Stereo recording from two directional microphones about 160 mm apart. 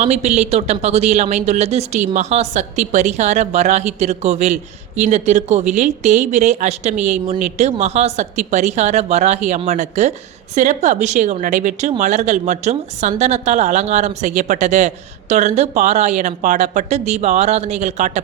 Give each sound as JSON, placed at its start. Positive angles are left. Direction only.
{"t": 0.0, "sound": "a woman's voice", "side_deg": -45}